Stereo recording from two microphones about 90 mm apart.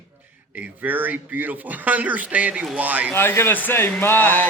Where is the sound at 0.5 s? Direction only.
20° right (ahead or behind).